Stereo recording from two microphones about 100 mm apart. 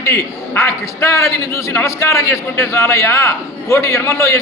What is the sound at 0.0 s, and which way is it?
A man's voice, 25° left (ahead or behind).